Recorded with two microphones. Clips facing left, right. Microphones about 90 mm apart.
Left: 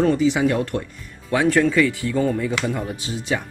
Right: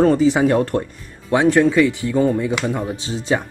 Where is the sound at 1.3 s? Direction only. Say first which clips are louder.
Right 3 dB; 25° right (ahead or behind).